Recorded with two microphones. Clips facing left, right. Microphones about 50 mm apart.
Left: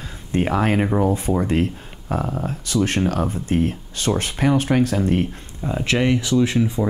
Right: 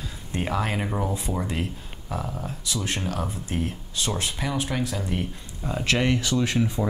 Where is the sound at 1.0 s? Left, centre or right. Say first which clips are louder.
Left 8 dB; left.